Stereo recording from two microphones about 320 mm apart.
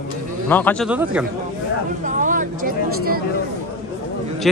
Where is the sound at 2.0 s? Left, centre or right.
Right.